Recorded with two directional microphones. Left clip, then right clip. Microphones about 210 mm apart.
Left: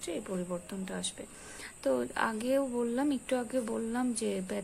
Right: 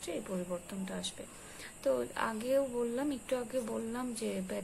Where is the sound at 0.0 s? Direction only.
20° left (ahead or behind).